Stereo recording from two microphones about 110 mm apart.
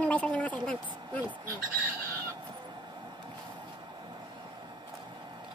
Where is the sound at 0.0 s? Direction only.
10° left (ahead or behind).